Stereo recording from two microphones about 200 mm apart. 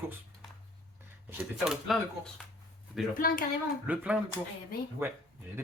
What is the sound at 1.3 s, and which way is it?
Speech, 5° right (ahead or behind).